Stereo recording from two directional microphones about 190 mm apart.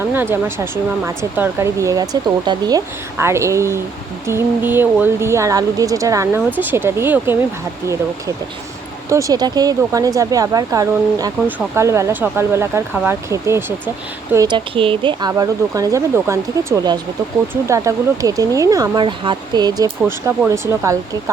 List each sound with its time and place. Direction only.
0.1 s speech: 10° right (ahead or behind)
9.0 s speech: 15° right (ahead or behind)
14.3 s speech: 25° right (ahead or behind)
20.0 s speech: 10° right (ahead or behind)